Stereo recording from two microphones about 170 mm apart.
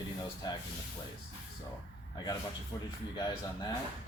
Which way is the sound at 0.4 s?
25° left (ahead or behind).